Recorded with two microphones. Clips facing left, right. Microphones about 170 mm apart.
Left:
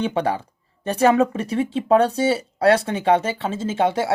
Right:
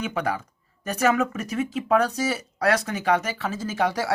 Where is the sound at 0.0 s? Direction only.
30° left (ahead or behind).